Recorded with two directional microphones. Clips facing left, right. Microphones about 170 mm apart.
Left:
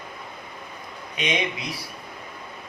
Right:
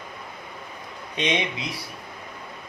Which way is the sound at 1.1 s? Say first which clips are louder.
Right 2 dB; 25° right (ahead or behind).